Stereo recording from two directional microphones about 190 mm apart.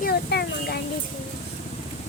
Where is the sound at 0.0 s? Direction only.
55° left (ahead or behind).